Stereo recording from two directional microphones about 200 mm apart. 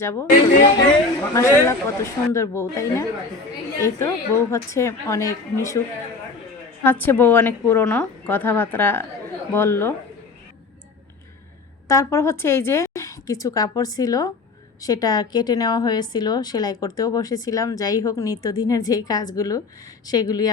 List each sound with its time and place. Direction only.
0.0 s a woman's voice: 15° left (ahead or behind)
1.3 s a woman's voice: 15° left (ahead or behind)
6.8 s a woman's voice: 10° left (ahead or behind)
11.9 s a woman's voice: 15° left (ahead or behind)